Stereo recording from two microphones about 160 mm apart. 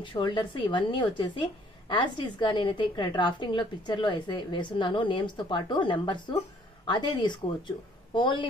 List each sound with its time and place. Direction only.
0.0 s a woman's voice: 30° left (ahead or behind)